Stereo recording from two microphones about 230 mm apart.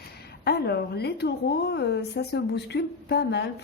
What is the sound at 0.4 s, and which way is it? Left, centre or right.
A woman's voice, left.